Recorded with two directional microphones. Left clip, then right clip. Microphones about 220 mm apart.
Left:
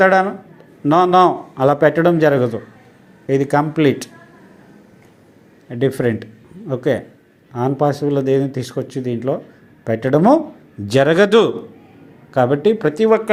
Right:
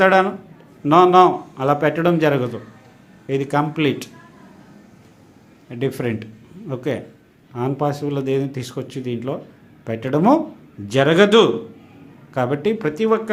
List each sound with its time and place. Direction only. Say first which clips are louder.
0.0 s speech: left 2 dB; 20° left (ahead or behind)
5.6 s a man's voice: left 6 dB; 15° left (ahead or behind)